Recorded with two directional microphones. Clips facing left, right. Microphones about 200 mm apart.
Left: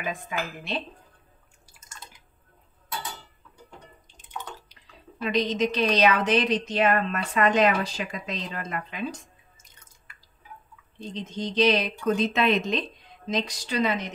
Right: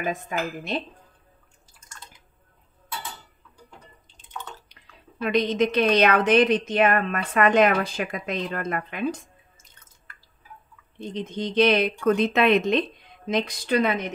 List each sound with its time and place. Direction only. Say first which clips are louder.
0.0 s speech: right 4 dB; 45° right (ahead or behind)
4.3 s bathtub: even; 10° left (ahead or behind)
5.2 s a woman's voice: right 3 dB; 55° right (ahead or behind)
11.1 s a woman's voice: right 3 dB; 55° right (ahead or behind)